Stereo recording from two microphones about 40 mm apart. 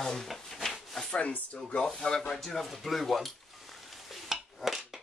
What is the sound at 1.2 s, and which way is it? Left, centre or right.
Speech, left.